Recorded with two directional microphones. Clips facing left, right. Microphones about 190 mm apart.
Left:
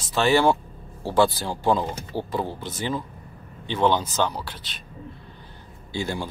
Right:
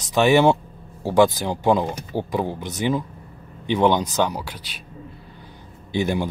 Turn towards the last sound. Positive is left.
turn(degrees=-20)  # may be behind; listen again after turning